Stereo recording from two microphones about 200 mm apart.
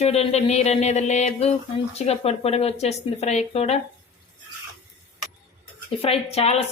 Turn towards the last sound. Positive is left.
turn(degrees=30)  # may be behind; listen again after turning